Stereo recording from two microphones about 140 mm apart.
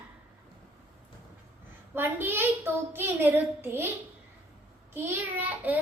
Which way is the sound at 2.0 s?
15° right (ahead or behind).